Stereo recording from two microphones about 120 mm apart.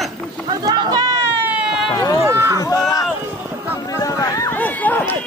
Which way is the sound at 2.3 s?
25° right (ahead or behind).